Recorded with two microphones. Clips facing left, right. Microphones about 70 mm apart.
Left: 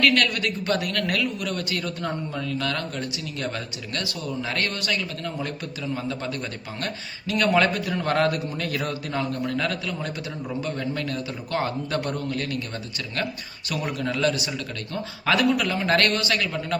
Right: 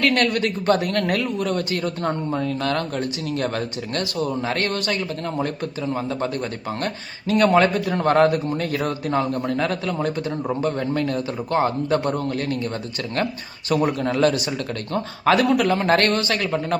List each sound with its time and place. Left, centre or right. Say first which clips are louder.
0.0 s speech: right 2 dB; right
13.7 s speech: right 7 dB; right